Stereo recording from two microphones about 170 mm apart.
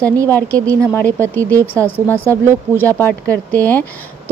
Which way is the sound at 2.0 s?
10° left (ahead or behind).